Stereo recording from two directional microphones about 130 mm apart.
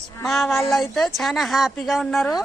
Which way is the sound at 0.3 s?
Centre (ahead or behind).